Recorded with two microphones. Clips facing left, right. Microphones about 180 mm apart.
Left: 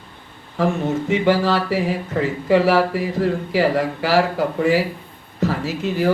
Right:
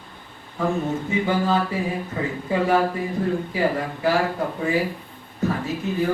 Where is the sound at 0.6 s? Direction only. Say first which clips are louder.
Left 4 dB; 85° left.